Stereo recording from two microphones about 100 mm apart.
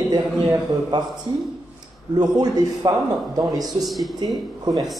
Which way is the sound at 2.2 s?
40° right (ahead or behind).